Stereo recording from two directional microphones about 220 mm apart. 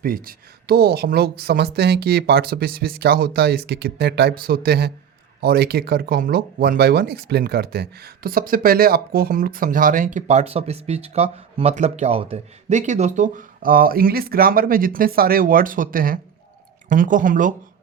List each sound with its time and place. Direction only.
0.0 s speech: 40° right (ahead or behind)